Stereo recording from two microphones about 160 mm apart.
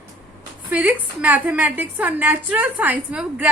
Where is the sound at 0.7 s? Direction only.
10° right (ahead or behind).